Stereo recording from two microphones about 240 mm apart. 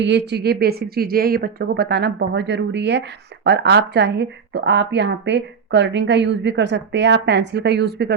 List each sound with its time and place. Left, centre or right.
0.0 s speech: right